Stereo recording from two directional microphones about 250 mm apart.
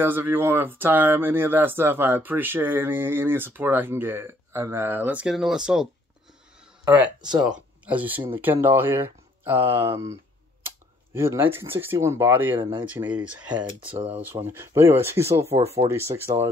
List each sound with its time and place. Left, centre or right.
0.0 s speech: centre
6.8 s a sound: centre
7.2 s speech: centre
7.4 s speech: centre
11.1 s speech: centre
13.6 s speech: centre
13.9 s speech: centre
15.4 s speech: right
15.9 s speech: centre